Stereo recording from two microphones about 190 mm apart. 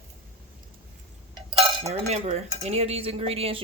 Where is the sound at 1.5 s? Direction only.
30° right (ahead or behind).